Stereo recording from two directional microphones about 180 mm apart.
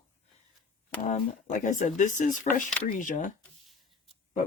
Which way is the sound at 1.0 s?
40° left (ahead or behind).